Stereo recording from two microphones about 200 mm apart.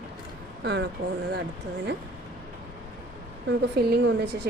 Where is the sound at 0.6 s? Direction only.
60° right (ahead or behind).